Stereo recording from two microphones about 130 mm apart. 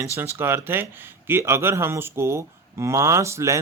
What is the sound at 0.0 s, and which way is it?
Speech, 20° right (ahead or behind).